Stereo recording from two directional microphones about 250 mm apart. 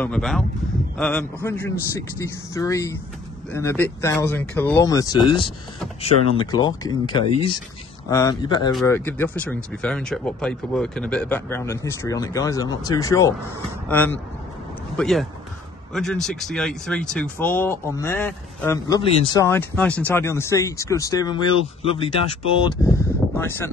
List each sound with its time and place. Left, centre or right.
0.0 s speech: centre